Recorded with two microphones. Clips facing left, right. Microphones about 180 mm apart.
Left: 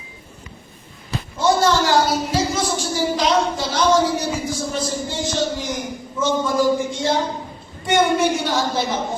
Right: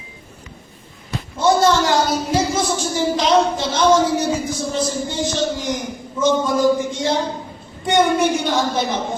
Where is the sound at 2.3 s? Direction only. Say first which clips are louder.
Right 2 dB; 20° right (ahead or behind).